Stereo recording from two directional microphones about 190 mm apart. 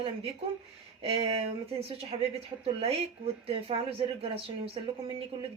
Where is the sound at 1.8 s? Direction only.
30° right (ahead or behind).